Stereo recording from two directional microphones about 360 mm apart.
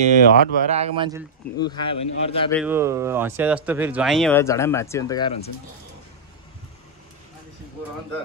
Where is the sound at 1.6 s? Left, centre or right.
Centre.